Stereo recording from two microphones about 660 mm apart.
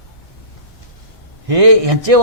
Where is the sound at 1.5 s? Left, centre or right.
Right.